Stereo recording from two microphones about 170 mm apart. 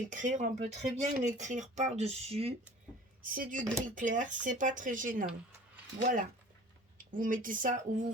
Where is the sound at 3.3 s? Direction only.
55° right (ahead or behind).